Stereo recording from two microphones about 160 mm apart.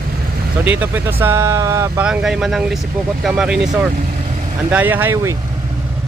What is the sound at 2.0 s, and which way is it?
Speech, 5° right (ahead or behind).